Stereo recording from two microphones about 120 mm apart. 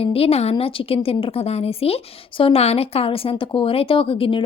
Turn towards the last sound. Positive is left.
turn(degrees=50)  # may be behind; listen again after turning